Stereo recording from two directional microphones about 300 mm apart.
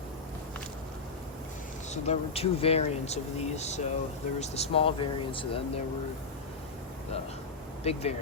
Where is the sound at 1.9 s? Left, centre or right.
Left.